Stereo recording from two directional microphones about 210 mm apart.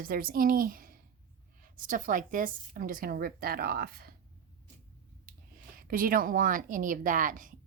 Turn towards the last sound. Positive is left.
turn(degrees=-40)  # may be behind; listen again after turning